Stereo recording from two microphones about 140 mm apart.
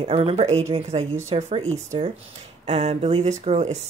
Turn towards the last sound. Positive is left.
turn(degrees=-55)  # may be behind; listen again after turning